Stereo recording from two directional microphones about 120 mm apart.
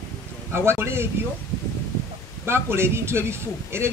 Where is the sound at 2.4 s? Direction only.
20° right (ahead or behind).